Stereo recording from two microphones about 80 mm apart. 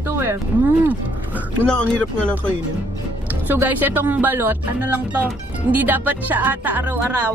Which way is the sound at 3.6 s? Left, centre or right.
Right.